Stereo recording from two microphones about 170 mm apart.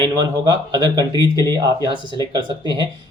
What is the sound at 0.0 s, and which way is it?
Speech, 25° right (ahead or behind).